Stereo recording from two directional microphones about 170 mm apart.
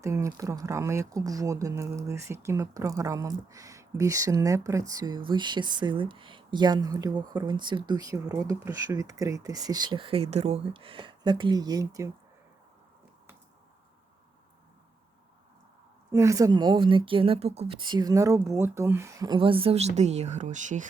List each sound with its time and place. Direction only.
0.0 s speech: 15° right (ahead or behind)
16.1 s speech: 20° right (ahead or behind); by 20.8 s 45° right (ahead or behind)